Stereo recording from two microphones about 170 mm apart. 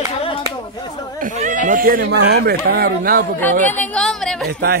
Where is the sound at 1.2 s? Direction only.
50° right (ahead or behind).